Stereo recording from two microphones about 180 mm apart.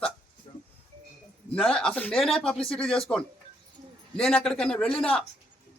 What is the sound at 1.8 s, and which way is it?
Speech, 5° left (ahead or behind).